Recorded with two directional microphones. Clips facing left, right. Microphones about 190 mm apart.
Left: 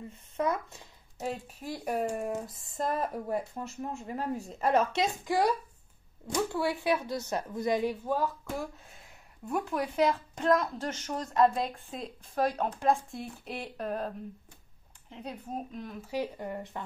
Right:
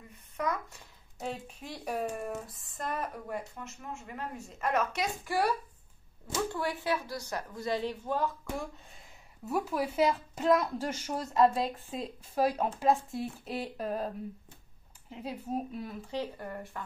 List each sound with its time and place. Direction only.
0.1 s speech: 25° left (ahead or behind)
1.2 s speech: 5° left (ahead or behind)
2.8 s speech: 35° left (ahead or behind); by 8.6 s 10° left (ahead or behind)
9.4 s speech: 5° right (ahead or behind)
16.1 s speech: 15° left (ahead or behind)